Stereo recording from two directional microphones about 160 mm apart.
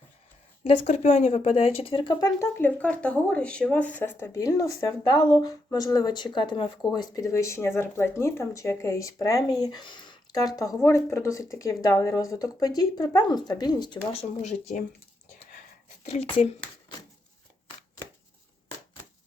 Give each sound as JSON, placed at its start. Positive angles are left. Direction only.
{"t": 0.6, "sound": "speech", "side_deg": 45}
{"t": 2.4, "sound": "speech", "side_deg": 10}
{"t": 16.0, "sound": "speech", "side_deg": 45}